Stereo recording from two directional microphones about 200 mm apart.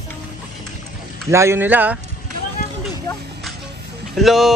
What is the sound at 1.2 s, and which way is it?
Speech, 15° right (ahead or behind).